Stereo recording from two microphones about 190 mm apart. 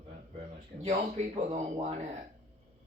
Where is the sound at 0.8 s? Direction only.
35° right (ahead or behind).